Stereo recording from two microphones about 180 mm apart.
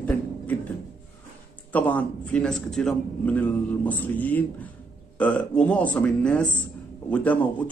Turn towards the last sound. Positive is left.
turn(degrees=10)  # may be behind; listen again after turning